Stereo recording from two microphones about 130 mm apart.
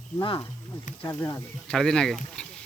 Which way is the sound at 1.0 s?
15° left (ahead or behind).